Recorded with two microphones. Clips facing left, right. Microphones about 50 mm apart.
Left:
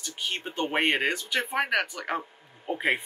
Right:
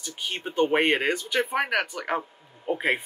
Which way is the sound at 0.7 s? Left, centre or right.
Centre.